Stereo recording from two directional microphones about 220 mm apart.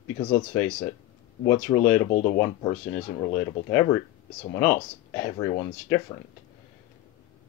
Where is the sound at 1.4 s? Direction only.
10° left (ahead or behind).